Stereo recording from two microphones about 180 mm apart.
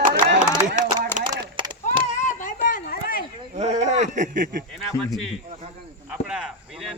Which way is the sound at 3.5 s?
40° right (ahead or behind).